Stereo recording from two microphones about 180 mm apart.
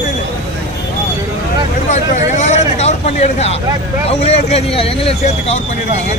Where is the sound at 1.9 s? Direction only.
40° left (ahead or behind).